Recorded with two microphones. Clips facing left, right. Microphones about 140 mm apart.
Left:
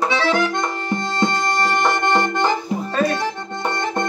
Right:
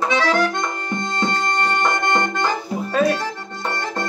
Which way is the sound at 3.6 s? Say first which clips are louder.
Left 3 dB; 20° left (ahead or behind).